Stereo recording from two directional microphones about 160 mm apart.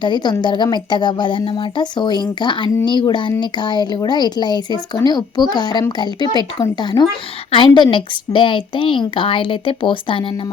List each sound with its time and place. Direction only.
0.0 s a woman's voice: 25° left (ahead or behind)